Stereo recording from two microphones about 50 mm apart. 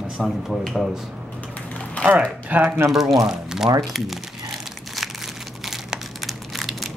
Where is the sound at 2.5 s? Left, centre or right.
Right.